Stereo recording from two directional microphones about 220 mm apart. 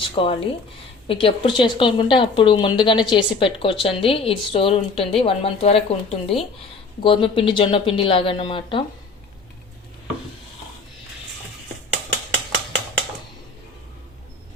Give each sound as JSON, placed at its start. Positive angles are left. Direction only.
{"t": 0.2, "sound": "a woman's voice", "side_deg": 25}